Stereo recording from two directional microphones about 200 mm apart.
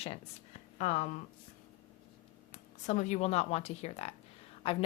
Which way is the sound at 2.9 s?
35° left (ahead or behind).